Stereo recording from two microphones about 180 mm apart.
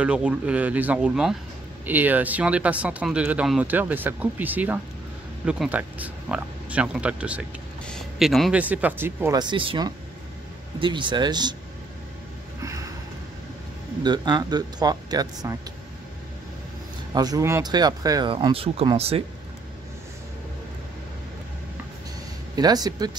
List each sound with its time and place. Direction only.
0.0 s a man's voice: 5° right (ahead or behind)
9.4 s speech: 25° right (ahead or behind)
14.0 s speech: 25° right (ahead or behind)
17.1 s speech: 20° right (ahead or behind)
22.6 s speech: 20° right (ahead or behind)